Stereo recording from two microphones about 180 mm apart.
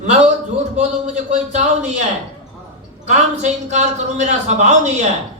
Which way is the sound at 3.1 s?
40° right (ahead or behind).